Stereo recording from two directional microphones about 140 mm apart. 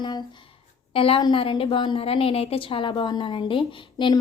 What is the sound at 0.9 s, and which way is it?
A woman's voice, 40° left (ahead or behind).